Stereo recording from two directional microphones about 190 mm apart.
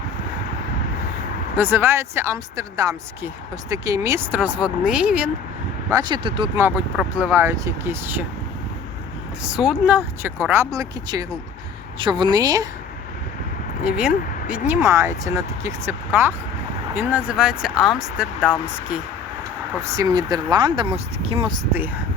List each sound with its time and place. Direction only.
1.5 s speech: 10° right (ahead or behind)
5.9 s speech: 20° right (ahead or behind)
6.6 s speech: 10° right (ahead or behind)
9.4 s speech: 5° right (ahead or behind)
13.8 s speech: 5° right (ahead or behind)
19.7 s speech: 15° right (ahead or behind)